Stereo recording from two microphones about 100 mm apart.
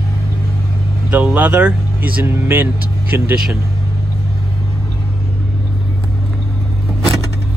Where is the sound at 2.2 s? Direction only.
25° right (ahead or behind).